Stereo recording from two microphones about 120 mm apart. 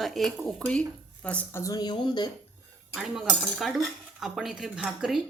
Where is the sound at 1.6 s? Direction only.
30° left (ahead or behind).